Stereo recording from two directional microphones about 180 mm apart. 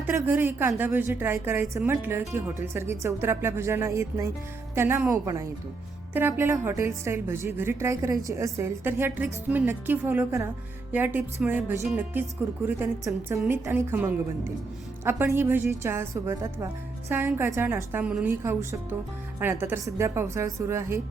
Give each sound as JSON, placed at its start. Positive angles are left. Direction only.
{"t": 0.1, "sound": "a woman's voice", "side_deg": -10}